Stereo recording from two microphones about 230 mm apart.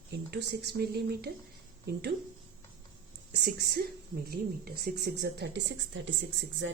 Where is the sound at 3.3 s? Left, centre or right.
Right.